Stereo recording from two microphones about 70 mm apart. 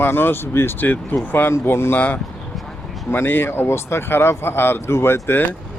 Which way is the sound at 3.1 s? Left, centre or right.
Left.